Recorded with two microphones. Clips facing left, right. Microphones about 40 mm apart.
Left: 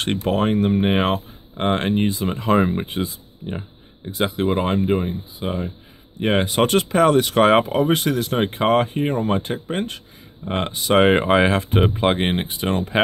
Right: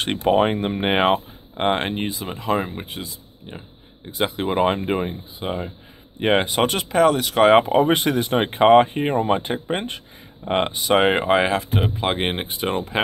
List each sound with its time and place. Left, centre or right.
0.2 s speech: right; by 3.0 s centre
4.0 s speech: centre
4.6 s speech: right
5.4 s speech: centre
6.5 s speech: centre
7.7 s speech: right
10.8 s speech: centre
11.7 s speech: centre
12.0 s speech: centre